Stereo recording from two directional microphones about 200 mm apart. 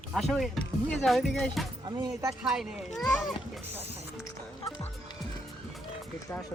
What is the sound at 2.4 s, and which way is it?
Speech, 5° right (ahead or behind).